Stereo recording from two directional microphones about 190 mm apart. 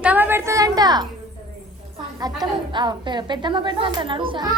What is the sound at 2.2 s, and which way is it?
A woman's voice, 20° right (ahead or behind).